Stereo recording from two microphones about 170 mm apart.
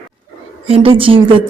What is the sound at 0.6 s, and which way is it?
Speech, 35° right (ahead or behind).